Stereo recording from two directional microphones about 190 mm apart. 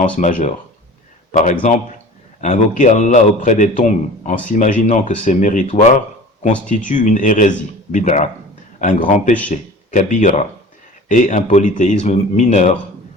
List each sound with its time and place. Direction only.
0.0 s a man's voice: 40° left (ahead or behind)
2.4 s a man's voice: 40° left (ahead or behind)